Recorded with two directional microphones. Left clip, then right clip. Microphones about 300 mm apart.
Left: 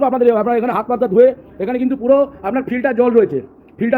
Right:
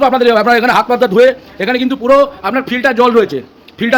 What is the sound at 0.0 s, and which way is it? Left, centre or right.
A man's voice, centre.